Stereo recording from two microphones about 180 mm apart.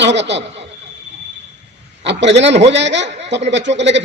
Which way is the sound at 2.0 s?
80° right.